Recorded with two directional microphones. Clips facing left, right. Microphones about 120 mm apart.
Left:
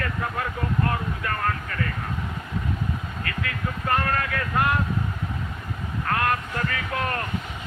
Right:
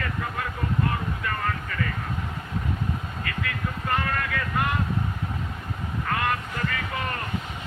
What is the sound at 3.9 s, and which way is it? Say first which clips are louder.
Speech: left 3 dB; 50° left (ahead or behind).